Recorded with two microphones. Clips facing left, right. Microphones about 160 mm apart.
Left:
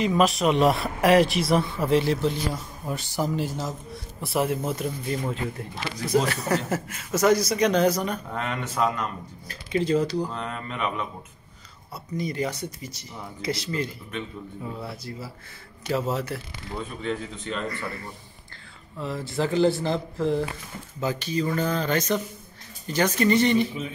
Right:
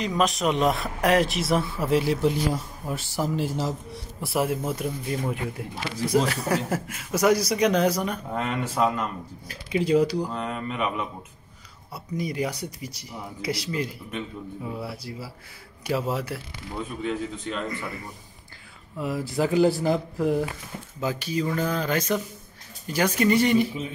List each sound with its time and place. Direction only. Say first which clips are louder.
0.0 s speech: left 3 dB; centre (ahead or behind)
3.5 s a man's voice: right 3 dB; 30° right (ahead or behind)
4.2 s speech: even; 5° right (ahead or behind)
17.6 s speech: even; 15° right (ahead or behind)